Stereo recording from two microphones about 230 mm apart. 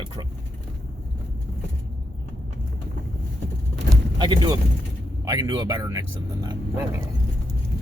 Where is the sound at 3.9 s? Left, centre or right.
Centre.